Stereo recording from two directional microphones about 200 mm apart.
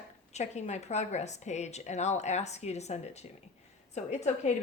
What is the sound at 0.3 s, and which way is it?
Speech, 35° left (ahead or behind).